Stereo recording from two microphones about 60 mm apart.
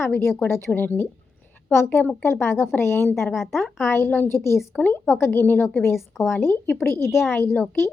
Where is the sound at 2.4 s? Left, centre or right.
Left.